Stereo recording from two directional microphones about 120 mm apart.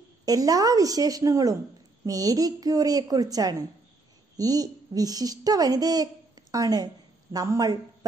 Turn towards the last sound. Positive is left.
turn(degrees=-30)  # may be behind; listen again after turning